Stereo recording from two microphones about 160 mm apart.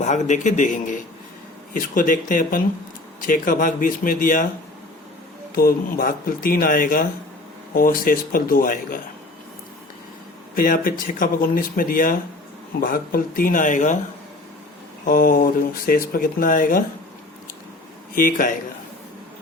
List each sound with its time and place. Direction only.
0.0 s a man's voice: 50° left (ahead or behind)
5.5 s speech: 65° left (ahead or behind)
10.5 s speech: 60° left (ahead or behind)
15.0 s speech: 60° left (ahead or behind)
18.1 s speech: 60° left (ahead or behind)